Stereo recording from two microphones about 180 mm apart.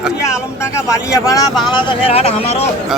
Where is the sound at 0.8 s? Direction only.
20° left (ahead or behind).